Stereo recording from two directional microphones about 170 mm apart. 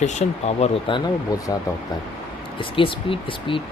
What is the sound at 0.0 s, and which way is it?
Speech, 40° left (ahead or behind).